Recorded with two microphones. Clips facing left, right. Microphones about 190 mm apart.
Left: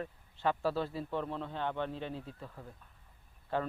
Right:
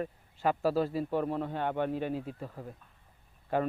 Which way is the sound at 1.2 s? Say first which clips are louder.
Right 5 dB; 50° right (ahead or behind).